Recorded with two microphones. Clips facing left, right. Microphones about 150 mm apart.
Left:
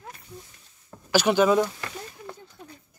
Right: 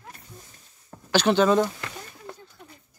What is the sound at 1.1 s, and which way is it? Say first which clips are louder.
Speech: even; 10° left (ahead or behind).